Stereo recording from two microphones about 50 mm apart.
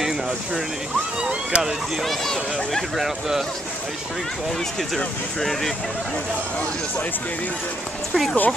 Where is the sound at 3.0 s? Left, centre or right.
Centre.